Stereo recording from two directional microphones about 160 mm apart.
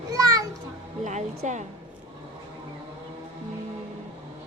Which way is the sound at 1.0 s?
50° right (ahead or behind).